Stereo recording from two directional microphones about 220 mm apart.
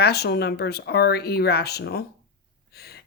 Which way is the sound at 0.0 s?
45° left (ahead or behind).